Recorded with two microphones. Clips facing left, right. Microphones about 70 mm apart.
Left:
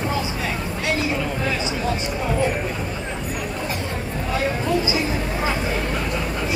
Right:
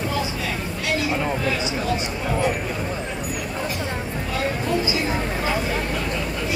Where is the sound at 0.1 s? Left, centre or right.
Left.